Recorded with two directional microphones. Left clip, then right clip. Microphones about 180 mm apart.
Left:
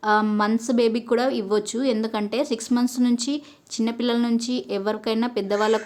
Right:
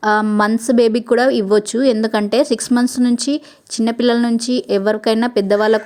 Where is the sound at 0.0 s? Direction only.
35° right (ahead or behind).